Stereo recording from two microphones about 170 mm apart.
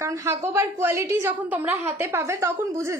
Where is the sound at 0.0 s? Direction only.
20° right (ahead or behind).